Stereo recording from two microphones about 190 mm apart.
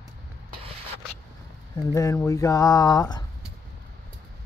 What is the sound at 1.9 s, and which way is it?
Speech, 15° left (ahead or behind).